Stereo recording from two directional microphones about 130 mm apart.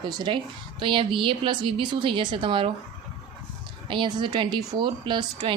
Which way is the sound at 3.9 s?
40° right (ahead or behind).